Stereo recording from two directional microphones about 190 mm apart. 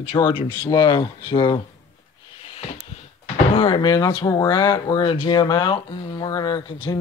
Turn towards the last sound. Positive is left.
turn(degrees=20)  # may be behind; listen again after turning